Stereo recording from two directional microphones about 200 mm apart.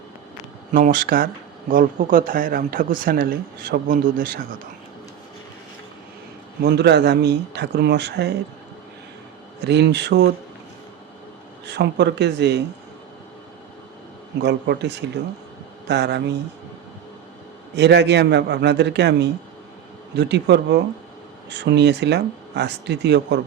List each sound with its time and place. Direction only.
0.7 s speech: 45° right (ahead or behind)
6.6 s speech: 55° right (ahead or behind)
9.6 s speech: 60° right (ahead or behind)
11.6 s speech: 55° right (ahead or behind)
14.4 s speech: 60° right (ahead or behind)
17.7 s speech: 60° right (ahead or behind)